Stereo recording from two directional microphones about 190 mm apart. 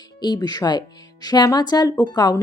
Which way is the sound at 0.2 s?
20° left (ahead or behind).